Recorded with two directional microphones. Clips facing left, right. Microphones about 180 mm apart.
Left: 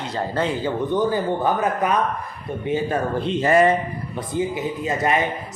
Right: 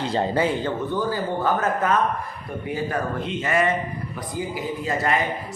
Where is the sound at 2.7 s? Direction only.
30° left (ahead or behind).